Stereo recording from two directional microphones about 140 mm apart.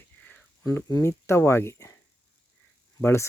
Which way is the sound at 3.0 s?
15° left (ahead or behind).